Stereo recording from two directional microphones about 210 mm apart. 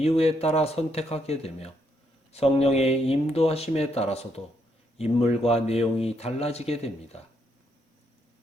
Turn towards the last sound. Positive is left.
turn(degrees=30)  # may be behind; listen again after turning